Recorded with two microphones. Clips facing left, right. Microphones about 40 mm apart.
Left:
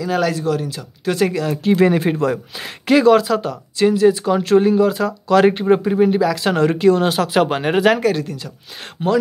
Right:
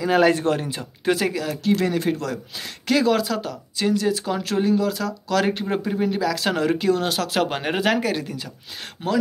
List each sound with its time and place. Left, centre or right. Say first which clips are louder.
0.0 s speech: right 1 dB; right
0.3 s speech: even; right
0.6 s speech: left 3 dB; right
1.1 s speech: left 7 dB; centre
1.6 s speech: left 7 dB; centre
3.0 s speech: left 8 dB; centre
6.1 s speech: left 6 dB; centre
9.0 s speech: left 6 dB; centre